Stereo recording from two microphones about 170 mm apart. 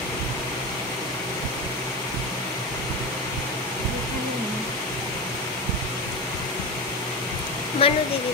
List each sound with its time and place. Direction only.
7.8 s speech: 35° left (ahead or behind)